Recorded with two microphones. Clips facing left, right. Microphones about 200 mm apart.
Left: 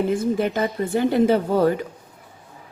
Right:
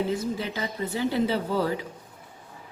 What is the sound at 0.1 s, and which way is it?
Speech, 50° left (ahead or behind).